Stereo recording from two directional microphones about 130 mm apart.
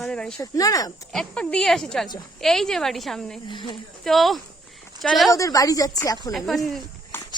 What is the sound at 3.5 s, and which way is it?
Speech, 35° left (ahead or behind).